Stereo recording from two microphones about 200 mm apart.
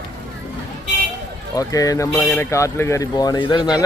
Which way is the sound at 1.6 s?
15° left (ahead or behind).